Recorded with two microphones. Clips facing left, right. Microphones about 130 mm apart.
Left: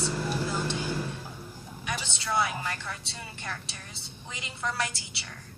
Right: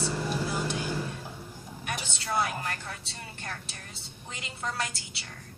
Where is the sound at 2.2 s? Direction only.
45° right (ahead or behind).